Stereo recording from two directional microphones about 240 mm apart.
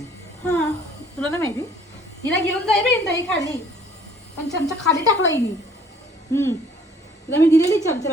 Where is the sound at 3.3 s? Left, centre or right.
Centre.